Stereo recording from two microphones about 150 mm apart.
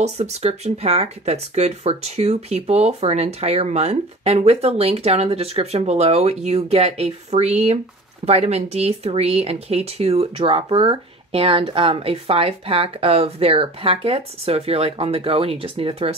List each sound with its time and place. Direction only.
0.0 s speech: 50° right (ahead or behind)